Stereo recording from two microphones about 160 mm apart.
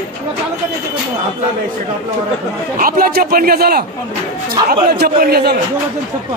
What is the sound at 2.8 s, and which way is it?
A man's voice, 65° right (ahead or behind).